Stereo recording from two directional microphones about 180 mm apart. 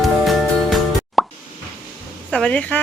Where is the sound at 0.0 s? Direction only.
Centre (ahead or behind).